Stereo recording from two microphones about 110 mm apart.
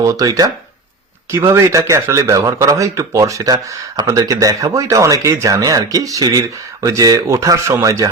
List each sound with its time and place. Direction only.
0.0 s a man's voice: 30° right (ahead or behind)